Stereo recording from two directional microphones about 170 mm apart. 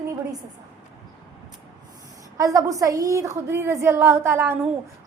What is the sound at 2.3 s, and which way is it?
A woman's voice, 20° right (ahead or behind).